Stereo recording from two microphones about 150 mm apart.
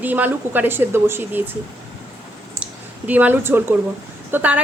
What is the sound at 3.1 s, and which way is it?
A woman's voice, 10° right (ahead or behind).